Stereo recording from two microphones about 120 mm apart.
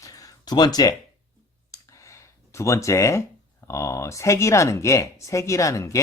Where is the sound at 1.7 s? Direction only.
25° left (ahead or behind).